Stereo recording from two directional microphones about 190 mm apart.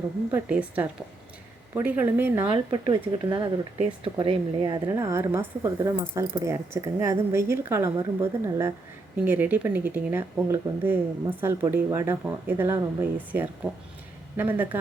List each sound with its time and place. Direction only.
0.3 s speech: 10° right (ahead or behind)
2.5 s speech: 25° right (ahead or behind); by 14.8 s 10° right (ahead or behind)